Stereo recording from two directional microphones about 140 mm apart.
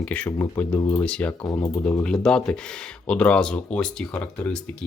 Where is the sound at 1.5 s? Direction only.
25° left (ahead or behind).